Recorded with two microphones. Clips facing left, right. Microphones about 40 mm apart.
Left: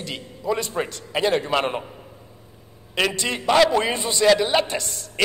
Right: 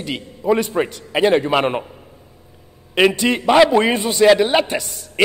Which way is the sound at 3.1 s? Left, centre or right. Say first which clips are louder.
Right 8 dB; right.